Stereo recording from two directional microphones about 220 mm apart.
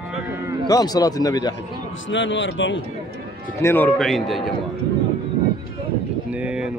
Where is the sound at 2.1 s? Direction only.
60° left (ahead or behind).